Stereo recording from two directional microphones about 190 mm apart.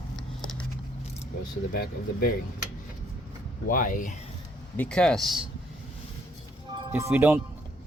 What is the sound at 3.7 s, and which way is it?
Speech, 45° left (ahead or behind).